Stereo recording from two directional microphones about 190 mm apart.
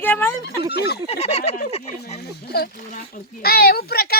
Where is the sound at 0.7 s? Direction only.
60° left (ahead or behind).